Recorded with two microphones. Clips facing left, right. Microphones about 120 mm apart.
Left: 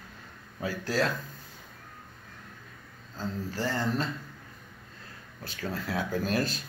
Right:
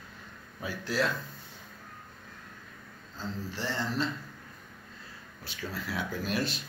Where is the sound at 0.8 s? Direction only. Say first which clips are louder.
Left 1 dB; 40° left (ahead or behind).